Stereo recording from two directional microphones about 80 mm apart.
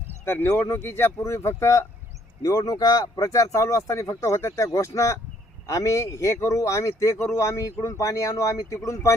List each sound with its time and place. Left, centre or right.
0.6 s speech: left
2.4 s speech: left